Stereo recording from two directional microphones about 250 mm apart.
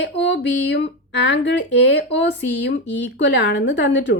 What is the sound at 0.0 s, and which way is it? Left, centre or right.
Speech, left.